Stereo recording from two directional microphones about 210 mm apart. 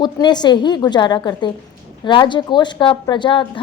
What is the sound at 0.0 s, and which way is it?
A woman's voice, 20° left (ahead or behind).